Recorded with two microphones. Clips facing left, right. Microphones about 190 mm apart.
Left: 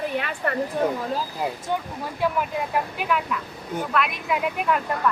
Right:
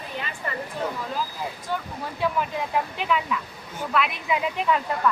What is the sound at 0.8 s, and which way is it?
Speech, 55° left (ahead or behind).